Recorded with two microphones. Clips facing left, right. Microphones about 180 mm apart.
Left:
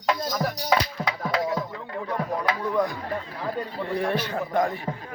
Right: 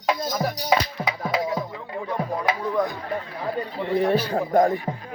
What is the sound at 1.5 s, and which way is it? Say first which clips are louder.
Music: right 1 dB; 15° right (ahead or behind).